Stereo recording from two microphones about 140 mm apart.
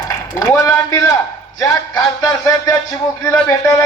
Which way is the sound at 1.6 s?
25° left (ahead or behind).